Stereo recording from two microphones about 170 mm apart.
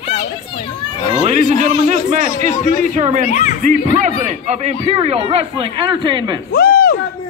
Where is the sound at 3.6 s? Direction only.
50° right (ahead or behind); by 6.4 s 25° right (ahead or behind).